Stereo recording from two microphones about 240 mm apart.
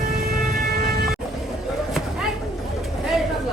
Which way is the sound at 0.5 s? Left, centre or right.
Right.